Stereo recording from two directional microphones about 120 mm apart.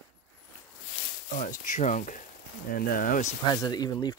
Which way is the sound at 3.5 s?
30° left (ahead or behind).